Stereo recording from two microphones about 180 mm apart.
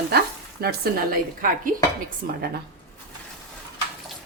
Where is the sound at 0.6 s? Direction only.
60° right (ahead or behind).